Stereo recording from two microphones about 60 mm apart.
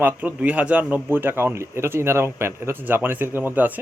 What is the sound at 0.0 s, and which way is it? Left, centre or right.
Speech, right.